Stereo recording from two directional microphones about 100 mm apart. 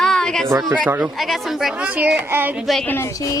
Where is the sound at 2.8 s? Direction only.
20° left (ahead or behind).